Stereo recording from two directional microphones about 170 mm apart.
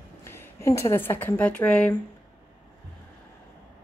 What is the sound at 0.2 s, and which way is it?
A woman's voice, 15° left (ahead or behind).